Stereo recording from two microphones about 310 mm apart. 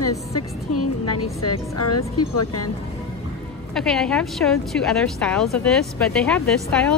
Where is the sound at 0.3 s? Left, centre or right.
Left.